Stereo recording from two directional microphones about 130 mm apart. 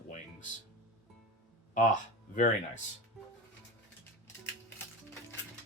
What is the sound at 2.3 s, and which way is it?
Speech, 70° left (ahead or behind).